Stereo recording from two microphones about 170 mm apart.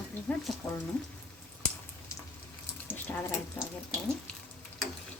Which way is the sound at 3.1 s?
10° left (ahead or behind).